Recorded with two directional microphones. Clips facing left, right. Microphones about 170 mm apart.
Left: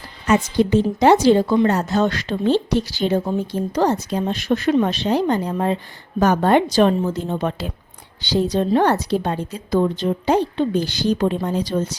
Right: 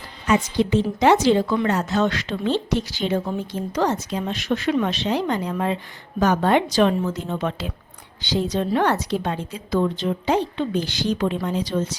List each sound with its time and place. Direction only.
0.3 s speech: 45° left (ahead or behind)